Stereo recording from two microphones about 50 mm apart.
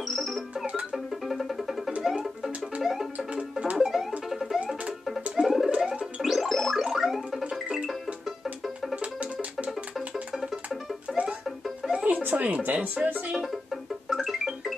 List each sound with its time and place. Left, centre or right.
0.0 s music: centre
3.2 s music: right
3.7 s music: centre
5.8 s music: centre
6.2 s music: centre
6.8 s a sound: centre
7.6 s music: centre
8.9 s music: right
11.1 s music: right
11.4 s music: centre
12.1 s music: right
13.4 s music: centre